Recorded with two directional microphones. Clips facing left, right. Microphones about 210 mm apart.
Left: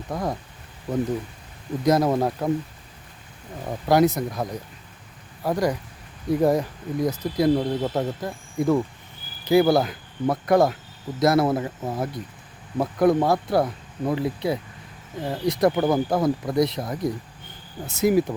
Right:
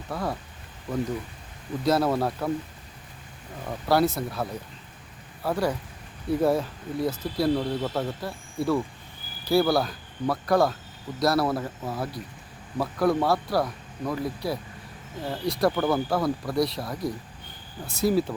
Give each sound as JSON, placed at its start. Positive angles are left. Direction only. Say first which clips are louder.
{"t": 0.1, "sound": "speech", "louder": "left 3 dB", "side_deg": 15}
{"t": 1.8, "sound": "speech", "louder": "left 3 dB", "side_deg": 15}
{"t": 3.7, "sound": "speech", "louder": "left 4 dB", "side_deg": 20}